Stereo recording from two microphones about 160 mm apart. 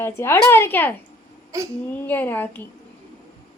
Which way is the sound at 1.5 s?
20° right (ahead or behind).